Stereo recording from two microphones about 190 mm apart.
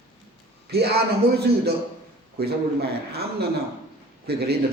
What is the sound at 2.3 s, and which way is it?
Speech, 55° right (ahead or behind).